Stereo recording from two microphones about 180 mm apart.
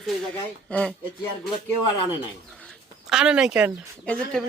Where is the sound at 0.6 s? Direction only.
5° left (ahead or behind).